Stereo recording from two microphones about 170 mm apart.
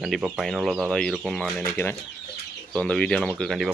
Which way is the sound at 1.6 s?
10° left (ahead or behind).